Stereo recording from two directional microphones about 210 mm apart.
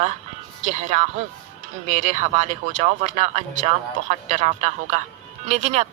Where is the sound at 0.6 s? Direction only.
35° right (ahead or behind).